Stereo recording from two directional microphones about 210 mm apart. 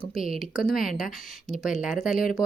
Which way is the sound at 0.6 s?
40° left (ahead or behind).